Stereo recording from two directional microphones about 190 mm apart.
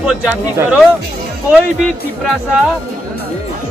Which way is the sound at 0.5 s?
5° right (ahead or behind).